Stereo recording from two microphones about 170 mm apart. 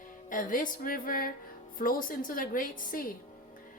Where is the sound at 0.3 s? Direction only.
50° left (ahead or behind).